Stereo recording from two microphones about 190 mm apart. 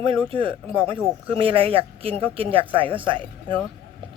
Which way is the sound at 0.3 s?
25° right (ahead or behind).